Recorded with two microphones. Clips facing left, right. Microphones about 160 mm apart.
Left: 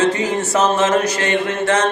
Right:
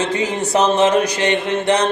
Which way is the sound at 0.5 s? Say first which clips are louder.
Right 2 dB; 15° right (ahead or behind).